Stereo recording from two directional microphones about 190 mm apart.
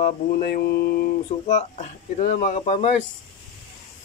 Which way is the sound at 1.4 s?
35° left (ahead or behind).